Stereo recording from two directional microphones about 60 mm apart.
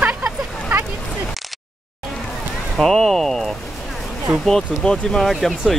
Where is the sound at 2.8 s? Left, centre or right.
Centre.